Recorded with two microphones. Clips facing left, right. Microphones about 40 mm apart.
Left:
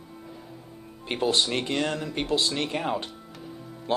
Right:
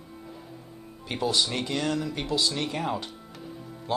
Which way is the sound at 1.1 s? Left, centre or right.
Left.